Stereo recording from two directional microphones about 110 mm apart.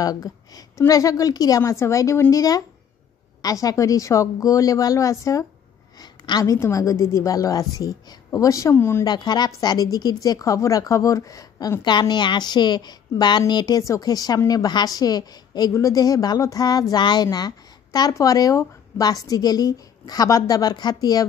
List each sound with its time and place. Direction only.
0.0 s a woman's voice: 35° left (ahead or behind)
9.0 s a woman's voice: 40° left (ahead or behind)